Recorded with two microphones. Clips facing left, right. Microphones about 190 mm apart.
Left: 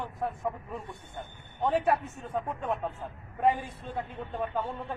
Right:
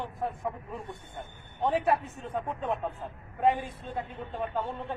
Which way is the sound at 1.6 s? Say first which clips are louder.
Even; centre (ahead or behind).